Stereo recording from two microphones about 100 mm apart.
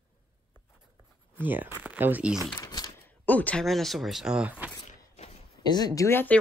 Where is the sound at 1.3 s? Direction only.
20° right (ahead or behind).